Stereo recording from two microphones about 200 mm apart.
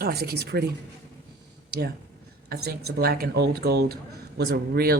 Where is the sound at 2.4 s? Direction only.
50° right (ahead or behind).